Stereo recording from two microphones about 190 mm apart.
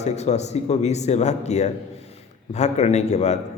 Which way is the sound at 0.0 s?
35° left (ahead or behind).